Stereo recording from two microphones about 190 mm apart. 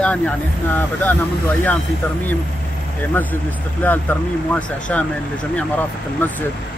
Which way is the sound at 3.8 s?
10° left (ahead or behind).